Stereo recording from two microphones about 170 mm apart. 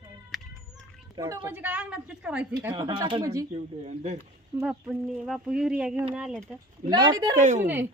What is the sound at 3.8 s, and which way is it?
Speech, 40° right (ahead or behind).